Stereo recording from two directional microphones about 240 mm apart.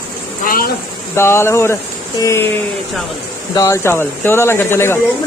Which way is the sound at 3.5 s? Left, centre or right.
Centre.